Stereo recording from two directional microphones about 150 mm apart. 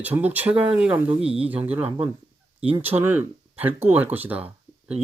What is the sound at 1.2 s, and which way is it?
Speech, 40° right (ahead or behind).